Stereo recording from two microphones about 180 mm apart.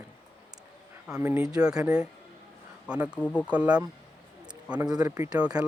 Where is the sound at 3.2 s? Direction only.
10° left (ahead or behind).